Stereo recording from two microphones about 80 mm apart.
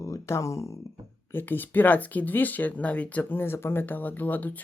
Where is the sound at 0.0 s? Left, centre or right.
Left.